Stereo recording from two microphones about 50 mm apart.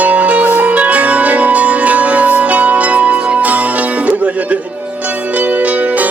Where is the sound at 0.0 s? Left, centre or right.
Right.